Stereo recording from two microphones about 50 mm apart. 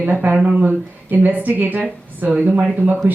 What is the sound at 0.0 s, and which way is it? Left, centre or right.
Speech, right.